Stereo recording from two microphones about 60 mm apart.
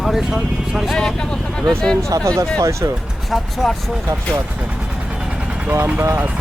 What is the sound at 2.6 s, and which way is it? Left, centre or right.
Speech, right.